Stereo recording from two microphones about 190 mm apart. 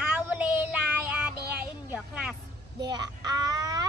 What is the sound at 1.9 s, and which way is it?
Vehicle, 5° right (ahead or behind).